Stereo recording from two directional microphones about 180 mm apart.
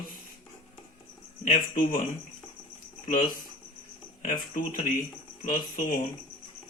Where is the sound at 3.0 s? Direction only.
50° left (ahead or behind).